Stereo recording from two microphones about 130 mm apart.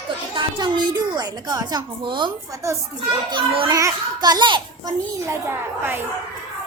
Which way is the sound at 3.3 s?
45° right (ahead or behind).